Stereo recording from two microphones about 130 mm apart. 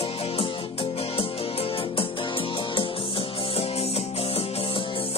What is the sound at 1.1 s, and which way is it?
Music, 45° left (ahead or behind).